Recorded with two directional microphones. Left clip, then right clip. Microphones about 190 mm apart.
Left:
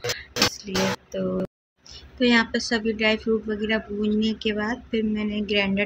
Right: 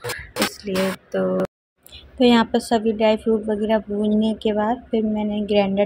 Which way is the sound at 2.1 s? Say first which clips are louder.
Right 4 dB; 20° right (ahead or behind).